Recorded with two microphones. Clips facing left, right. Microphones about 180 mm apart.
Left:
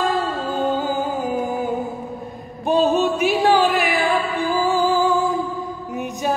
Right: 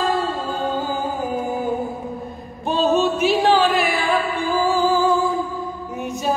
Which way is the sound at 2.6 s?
15° left (ahead or behind).